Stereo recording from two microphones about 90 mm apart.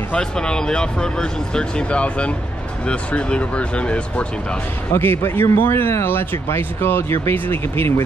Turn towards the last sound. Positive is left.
turn(degrees=25)  # may be behind; listen again after turning